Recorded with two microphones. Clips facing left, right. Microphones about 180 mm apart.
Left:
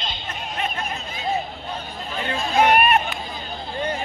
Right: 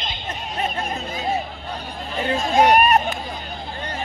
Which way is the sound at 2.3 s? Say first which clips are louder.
Right 2 dB; 35° right (ahead or behind).